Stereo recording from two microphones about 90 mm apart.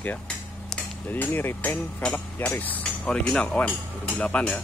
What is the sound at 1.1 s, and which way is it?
Speech, 25° left (ahead or behind).